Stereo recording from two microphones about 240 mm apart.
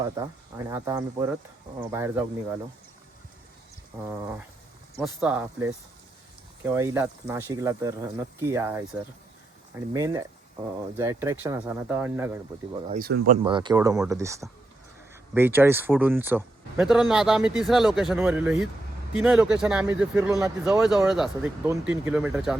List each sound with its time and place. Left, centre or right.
0.2 s speech: centre
4.9 s speech: centre
12.9 s speech: right
13.4 s speech: centre